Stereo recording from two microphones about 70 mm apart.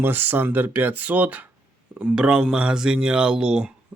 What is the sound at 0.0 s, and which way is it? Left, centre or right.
A man's voice, right.